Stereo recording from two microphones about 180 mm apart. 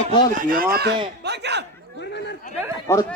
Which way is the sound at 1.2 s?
70° right (ahead or behind).